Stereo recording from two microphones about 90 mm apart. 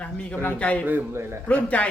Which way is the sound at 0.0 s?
15° left (ahead or behind).